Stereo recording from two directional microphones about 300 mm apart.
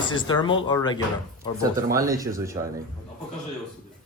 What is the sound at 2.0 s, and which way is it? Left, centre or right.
Speech, centre.